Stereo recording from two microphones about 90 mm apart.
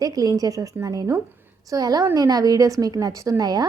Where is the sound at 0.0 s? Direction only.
45° right (ahead or behind).